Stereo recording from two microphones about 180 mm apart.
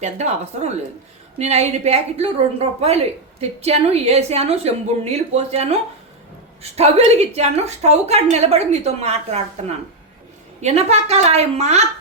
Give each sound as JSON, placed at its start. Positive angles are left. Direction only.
{"t": 0.0, "sound": "a woman's voice", "side_deg": -40}